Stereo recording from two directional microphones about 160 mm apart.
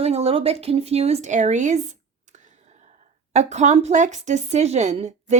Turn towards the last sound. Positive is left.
turn(degrees=-45)  # may be behind; listen again after turning